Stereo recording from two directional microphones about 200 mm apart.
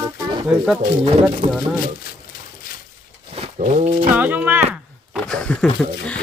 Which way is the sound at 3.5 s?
35° right (ahead or behind).